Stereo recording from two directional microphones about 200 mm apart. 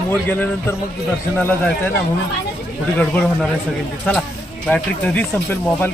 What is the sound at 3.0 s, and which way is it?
Speech, 5° left (ahead or behind).